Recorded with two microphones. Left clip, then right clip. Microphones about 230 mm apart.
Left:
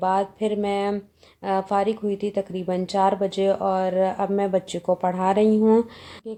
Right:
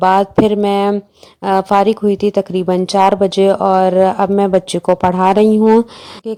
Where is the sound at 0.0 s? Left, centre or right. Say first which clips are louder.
Right 12 dB; right.